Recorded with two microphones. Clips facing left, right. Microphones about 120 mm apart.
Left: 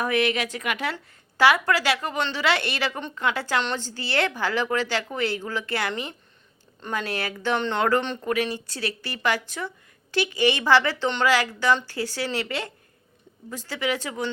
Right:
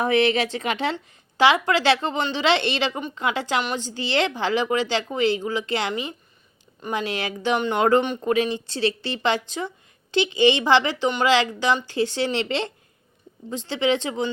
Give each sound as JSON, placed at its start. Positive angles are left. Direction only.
{"t": 0.0, "sound": "speech", "side_deg": -25}